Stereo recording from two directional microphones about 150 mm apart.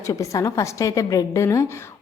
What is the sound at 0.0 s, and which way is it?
A woman's voice, 20° left (ahead or behind).